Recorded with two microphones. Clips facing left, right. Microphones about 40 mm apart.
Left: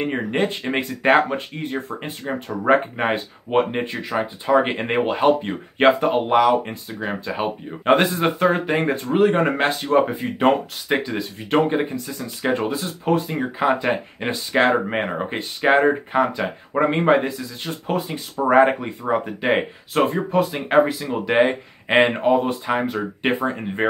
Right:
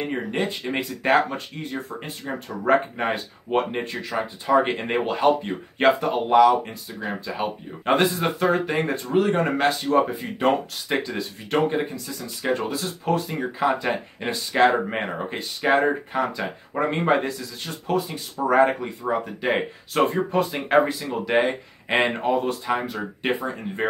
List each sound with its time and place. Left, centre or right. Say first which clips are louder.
0.0 s speech: left 4 dB; left
2.6 s speech: left 2 dB; left
19.9 s speech: left 1 dB; centre
21.1 s speech: left 3 dB; left
23.8 s speech: left 4 dB; left